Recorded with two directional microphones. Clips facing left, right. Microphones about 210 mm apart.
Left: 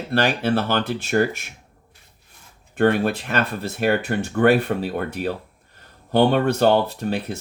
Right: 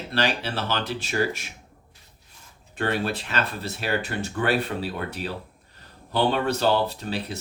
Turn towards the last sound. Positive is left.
turn(degrees=50)  # may be behind; listen again after turning